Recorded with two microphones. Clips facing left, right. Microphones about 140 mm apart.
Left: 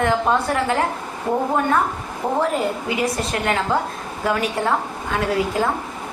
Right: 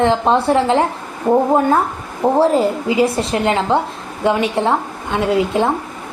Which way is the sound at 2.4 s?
30° right (ahead or behind).